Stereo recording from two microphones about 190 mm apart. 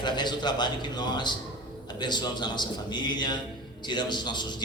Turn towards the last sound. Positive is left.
turn(degrees=25)  # may be behind; listen again after turning